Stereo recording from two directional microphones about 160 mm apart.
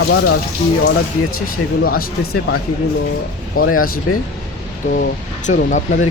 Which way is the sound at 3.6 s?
65° left (ahead or behind).